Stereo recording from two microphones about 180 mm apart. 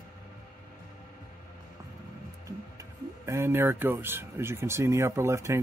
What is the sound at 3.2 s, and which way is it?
Speech, 15° right (ahead or behind).